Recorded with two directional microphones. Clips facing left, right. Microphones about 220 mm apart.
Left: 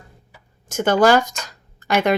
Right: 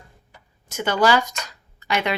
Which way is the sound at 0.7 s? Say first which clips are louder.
Left 5 dB; 45° left (ahead or behind).